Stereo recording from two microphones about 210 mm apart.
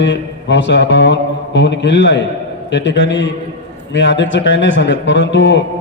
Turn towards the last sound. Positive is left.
turn(degrees=60)  # may be behind; listen again after turning